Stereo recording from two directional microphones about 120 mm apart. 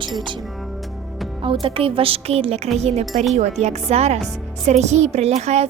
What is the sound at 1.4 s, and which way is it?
Speech, 45° right (ahead or behind).